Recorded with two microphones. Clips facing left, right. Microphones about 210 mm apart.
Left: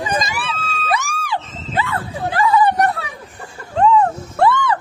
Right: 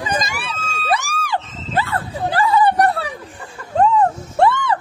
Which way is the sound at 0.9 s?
35° right (ahead or behind).